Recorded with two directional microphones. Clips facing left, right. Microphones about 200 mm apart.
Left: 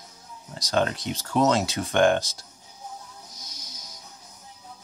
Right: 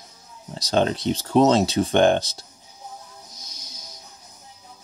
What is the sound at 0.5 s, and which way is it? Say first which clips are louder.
Speech: right 4 dB; 30° right (ahead or behind).